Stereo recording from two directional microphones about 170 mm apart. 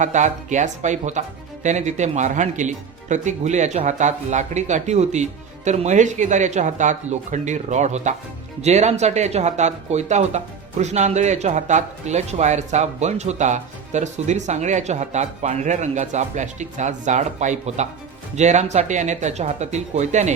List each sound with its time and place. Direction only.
0.0 s speech: 45° right (ahead or behind)